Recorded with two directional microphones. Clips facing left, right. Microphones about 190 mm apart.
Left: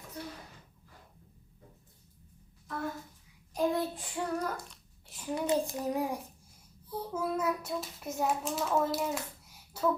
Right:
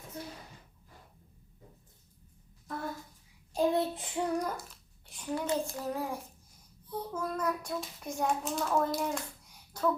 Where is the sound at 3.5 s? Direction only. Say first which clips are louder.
Right 2 dB; 25° right (ahead or behind).